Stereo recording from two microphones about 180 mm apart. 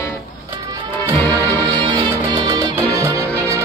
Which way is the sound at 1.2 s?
10° left (ahead or behind).